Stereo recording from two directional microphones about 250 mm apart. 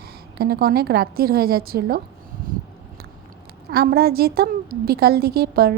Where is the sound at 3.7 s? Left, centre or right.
Right.